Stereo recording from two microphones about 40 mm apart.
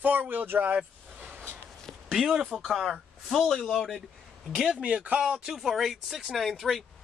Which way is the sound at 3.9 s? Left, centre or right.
Centre.